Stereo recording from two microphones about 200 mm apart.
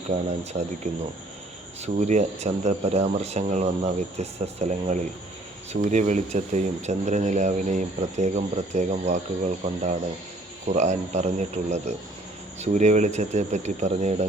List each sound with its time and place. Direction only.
0.1 s speech: 35° right (ahead or behind)
1.8 s speech: 35° right (ahead or behind)